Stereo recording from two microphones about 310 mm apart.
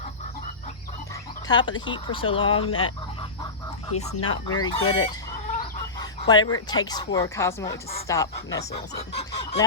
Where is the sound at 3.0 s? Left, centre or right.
Centre.